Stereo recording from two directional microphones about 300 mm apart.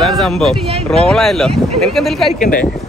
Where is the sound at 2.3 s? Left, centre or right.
Left.